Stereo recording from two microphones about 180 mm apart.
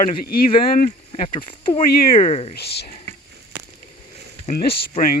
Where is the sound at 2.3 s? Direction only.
35° left (ahead or behind).